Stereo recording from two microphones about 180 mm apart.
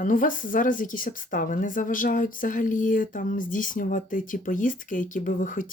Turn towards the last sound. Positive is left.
turn(degrees=45)  # may be behind; listen again after turning